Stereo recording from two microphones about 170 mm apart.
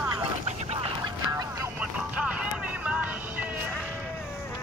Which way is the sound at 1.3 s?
10° right (ahead or behind).